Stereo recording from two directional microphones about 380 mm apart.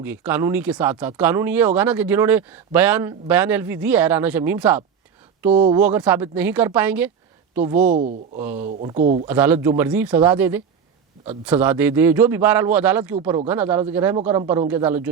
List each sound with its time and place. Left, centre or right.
0.0 s speech: centre
5.4 s speech: centre
5.8 s speech: centre
7.9 s speech: centre
8.4 s speech: centre
8.6 s speech: centre
9.2 s speech: centre